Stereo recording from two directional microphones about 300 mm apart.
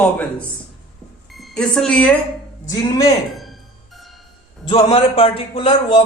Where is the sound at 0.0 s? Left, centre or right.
Centre.